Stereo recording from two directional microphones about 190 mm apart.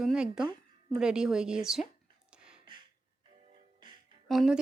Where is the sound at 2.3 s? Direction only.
5° right (ahead or behind).